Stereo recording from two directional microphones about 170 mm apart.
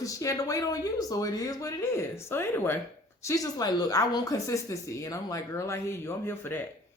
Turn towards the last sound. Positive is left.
turn(degrees=10)  # may be behind; listen again after turning